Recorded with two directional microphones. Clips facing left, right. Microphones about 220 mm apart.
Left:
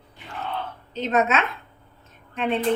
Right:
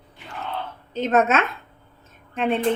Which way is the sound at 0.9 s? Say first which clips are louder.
Right 3 dB; 50° right (ahead or behind).